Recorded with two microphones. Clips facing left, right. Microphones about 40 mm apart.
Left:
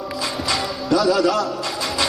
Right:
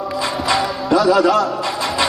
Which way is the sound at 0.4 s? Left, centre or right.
Centre.